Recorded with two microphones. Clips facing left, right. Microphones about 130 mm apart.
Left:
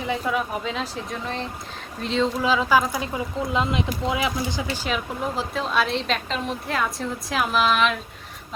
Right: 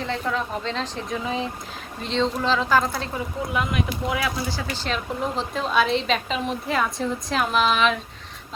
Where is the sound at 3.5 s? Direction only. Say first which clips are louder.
Left 1 dB; 25° left (ahead or behind).